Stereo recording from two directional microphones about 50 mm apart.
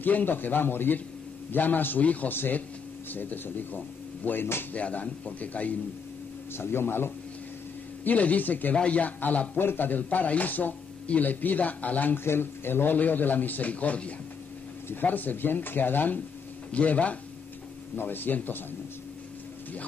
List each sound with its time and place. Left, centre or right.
0.0 s speech: left
2.3 s a man's voice: left
4.7 s speech: left
6.5 s speech: left
8.0 s speech: left
8.7 s a man's voice: left
9.6 s speech: left
12.2 s speech: left
15.0 s speech: left
16.7 s a man's voice: left
17.9 s speech: left